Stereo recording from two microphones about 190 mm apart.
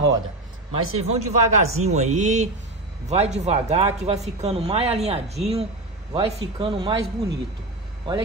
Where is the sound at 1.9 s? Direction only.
35° right (ahead or behind).